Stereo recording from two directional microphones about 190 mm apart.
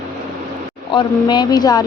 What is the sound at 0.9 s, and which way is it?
Speech, 20° left (ahead or behind).